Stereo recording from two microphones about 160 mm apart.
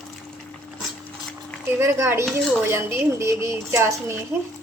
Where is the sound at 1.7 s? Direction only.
15° right (ahead or behind).